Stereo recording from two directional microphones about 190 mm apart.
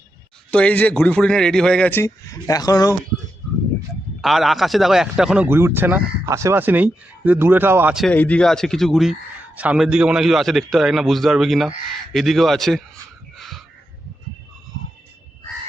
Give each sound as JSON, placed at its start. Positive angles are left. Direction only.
{"t": 0.5, "sound": "a man's voice", "side_deg": 5}
{"t": 4.2, "sound": "speech", "side_deg": 0}
{"t": 8.0, "sound": "a man's voice", "side_deg": 10}
{"t": 13.3, "sound": "a sound", "side_deg": 0}